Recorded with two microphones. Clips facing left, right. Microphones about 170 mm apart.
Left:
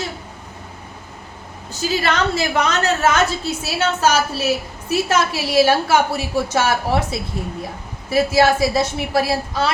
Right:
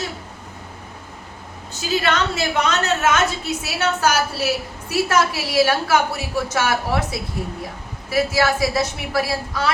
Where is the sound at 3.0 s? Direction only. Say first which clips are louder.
Left 2 dB; 30° left (ahead or behind).